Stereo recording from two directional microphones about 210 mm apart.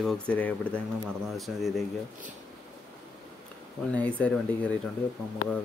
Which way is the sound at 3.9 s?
5° left (ahead or behind).